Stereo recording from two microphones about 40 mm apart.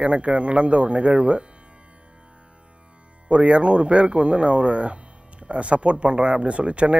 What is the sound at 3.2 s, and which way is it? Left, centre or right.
Speech, right.